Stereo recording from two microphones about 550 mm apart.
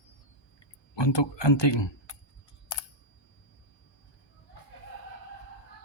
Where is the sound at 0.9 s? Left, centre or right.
Left.